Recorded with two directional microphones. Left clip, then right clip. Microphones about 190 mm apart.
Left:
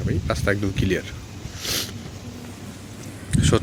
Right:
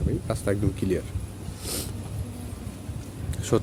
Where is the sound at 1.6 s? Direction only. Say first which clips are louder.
Left 9 dB; 10° right (ahead or behind).